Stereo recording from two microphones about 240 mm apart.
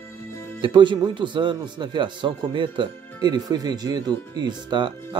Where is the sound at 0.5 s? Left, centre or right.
Right.